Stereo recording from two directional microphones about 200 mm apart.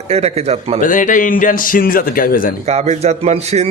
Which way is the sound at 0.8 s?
40° left (ahead or behind).